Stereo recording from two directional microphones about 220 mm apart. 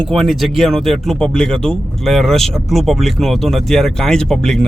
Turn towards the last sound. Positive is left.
turn(degrees=5)  # may be behind; listen again after turning